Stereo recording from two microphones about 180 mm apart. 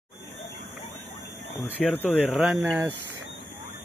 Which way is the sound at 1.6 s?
10° left (ahead or behind).